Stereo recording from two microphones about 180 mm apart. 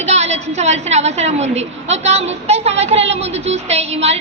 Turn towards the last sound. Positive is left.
turn(degrees=-35)  # may be behind; listen again after turning